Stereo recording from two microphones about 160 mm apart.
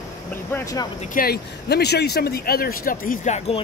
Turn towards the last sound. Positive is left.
turn(degrees=45)  # may be behind; listen again after turning